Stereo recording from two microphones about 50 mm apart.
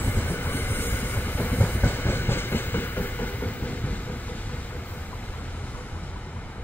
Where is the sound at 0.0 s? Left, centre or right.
Left.